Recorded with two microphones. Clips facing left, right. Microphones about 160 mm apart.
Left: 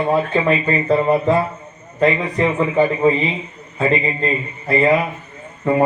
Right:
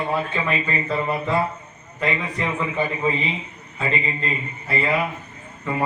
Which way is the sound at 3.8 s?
35° left (ahead or behind).